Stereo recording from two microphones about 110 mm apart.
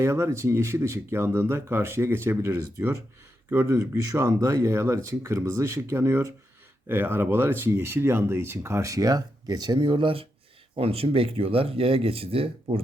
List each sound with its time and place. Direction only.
0.0 s speech: 25° right (ahead or behind); by 12.8 s 60° right (ahead or behind)